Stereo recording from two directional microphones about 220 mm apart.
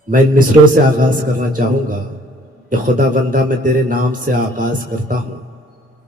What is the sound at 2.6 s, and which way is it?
A man's voice, 35° right (ahead or behind).